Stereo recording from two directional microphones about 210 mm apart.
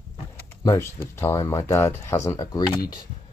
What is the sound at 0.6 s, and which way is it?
Speech, 15° left (ahead or behind).